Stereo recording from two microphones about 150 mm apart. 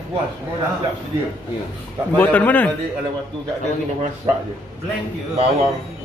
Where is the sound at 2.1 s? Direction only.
10° left (ahead or behind).